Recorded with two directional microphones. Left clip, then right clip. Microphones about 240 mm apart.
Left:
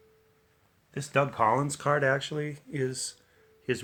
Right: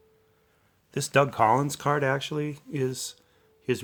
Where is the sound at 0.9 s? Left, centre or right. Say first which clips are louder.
Right 4 dB; right.